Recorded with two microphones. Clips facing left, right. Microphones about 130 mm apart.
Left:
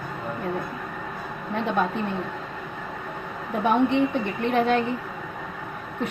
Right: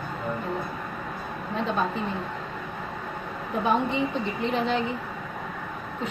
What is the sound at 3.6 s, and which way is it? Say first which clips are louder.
A woman's voice: left 4 dB; 65° left (ahead or behind).